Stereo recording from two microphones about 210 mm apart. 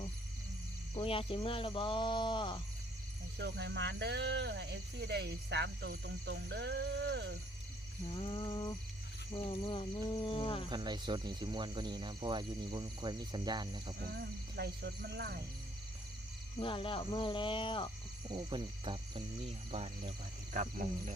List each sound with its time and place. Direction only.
0.9 s speech: 25° left (ahead or behind)
3.3 s speech: 55° right (ahead or behind)
8.0 s speech: 25° left (ahead or behind)
10.7 s speech: 20° right (ahead or behind)
14.0 s speech: 50° right (ahead or behind)
16.6 s speech: 25° left (ahead or behind)
18.3 s speech: 20° right (ahead or behind); by 20.8 s 35° right (ahead or behind)